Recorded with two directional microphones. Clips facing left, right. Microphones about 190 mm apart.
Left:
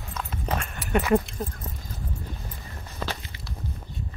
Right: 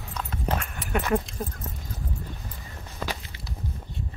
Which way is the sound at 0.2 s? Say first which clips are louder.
Right 1 dB; centre (ahead or behind).